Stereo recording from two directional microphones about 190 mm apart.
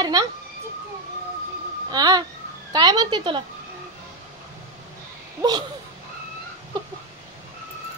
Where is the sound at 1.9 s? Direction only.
20° right (ahead or behind).